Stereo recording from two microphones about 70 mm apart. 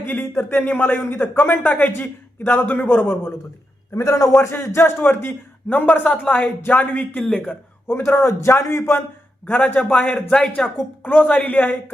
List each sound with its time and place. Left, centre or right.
0.0 s speech: left
3.9 s speech: left; by 7.5 s centre
7.9 s a man's voice: left